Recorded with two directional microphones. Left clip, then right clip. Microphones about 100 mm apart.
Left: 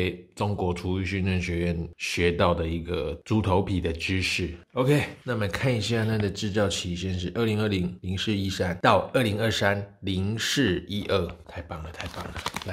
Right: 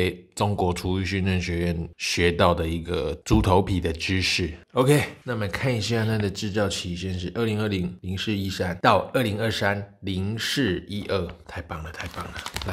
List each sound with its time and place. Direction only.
0.0 s speech: 30° right (ahead or behind)
3.3 s speech: 35° right (ahead or behind)
4.7 s speech: 40° right (ahead or behind)
5.2 s speech: 5° right (ahead or behind)
11.5 s speech: 35° right (ahead or behind)